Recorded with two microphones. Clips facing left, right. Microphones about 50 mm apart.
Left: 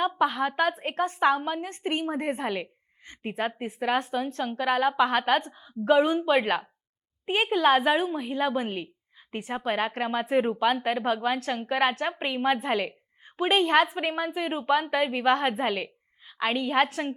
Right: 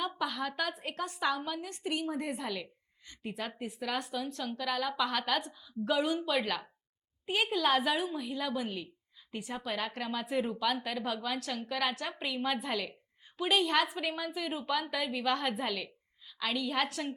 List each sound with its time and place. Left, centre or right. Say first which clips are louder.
0.0 s a woman's voice: left 9 dB; left